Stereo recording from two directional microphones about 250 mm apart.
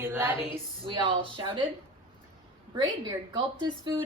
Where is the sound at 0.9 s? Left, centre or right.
Centre.